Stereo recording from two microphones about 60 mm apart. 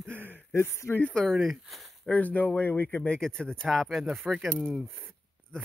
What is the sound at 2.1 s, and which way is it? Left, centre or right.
Speech, left.